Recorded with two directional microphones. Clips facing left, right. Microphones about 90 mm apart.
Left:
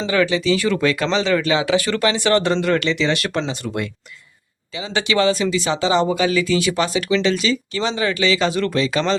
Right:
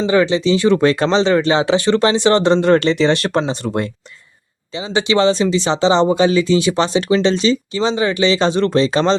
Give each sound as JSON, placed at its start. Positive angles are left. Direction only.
{"t": 0.1, "sound": "speech", "side_deg": -25}
{"t": 4.9, "sound": "speech", "side_deg": -25}